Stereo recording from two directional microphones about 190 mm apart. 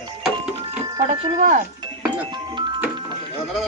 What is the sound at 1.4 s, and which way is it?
Speech, 45° right (ahead or behind).